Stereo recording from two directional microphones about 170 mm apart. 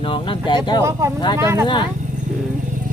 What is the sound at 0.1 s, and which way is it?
Speech, 30° left (ahead or behind).